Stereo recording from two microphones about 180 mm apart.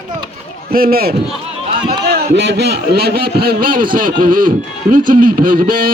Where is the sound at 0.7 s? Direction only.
55° right (ahead or behind).